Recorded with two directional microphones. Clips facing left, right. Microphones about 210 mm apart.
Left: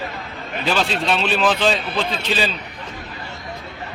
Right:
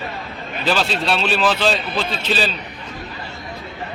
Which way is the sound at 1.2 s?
15° left (ahead or behind).